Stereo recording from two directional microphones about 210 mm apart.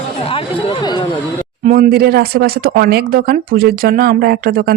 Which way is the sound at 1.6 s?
40° right (ahead or behind).